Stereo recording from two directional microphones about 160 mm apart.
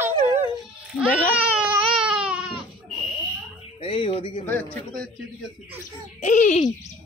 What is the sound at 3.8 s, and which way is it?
Music, 35° left (ahead or behind).